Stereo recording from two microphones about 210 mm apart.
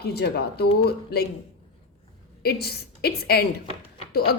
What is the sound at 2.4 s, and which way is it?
A woman's voice, 50° left (ahead or behind).